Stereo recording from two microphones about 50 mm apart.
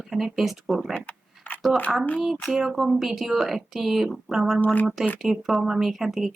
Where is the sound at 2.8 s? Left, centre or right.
Centre.